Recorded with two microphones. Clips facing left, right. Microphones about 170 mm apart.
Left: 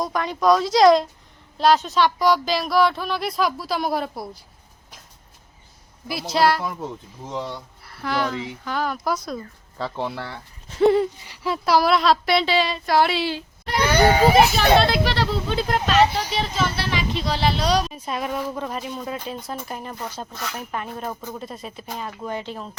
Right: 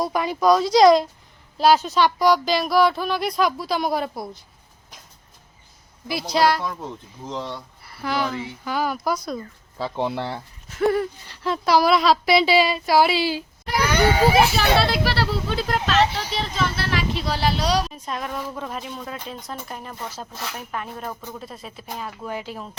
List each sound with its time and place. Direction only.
0.0 s speech: 5° right (ahead or behind)
6.1 s speech: centre (ahead or behind)
10.0 s speech: 20° right (ahead or behind)
10.8 s a sound: 25° left (ahead or behind)
11.4 s speech: 5° left (ahead or behind)
17.9 s speech: 5° left (ahead or behind)